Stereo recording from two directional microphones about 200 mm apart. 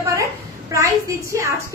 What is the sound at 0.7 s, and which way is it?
Speech, 15° right (ahead or behind).